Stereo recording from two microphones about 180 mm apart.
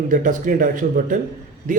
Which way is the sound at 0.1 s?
45° right (ahead or behind).